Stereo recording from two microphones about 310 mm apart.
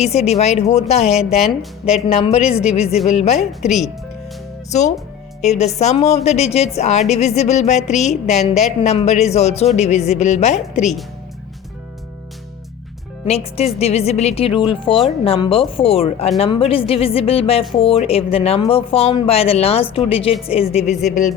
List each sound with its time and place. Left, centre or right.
0.0 s a woman's voice: left
3.7 s speech: centre
4.7 s a woman's voice: left
13.2 s a woman's voice: centre